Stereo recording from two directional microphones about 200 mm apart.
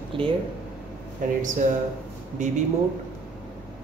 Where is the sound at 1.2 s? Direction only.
40° right (ahead or behind).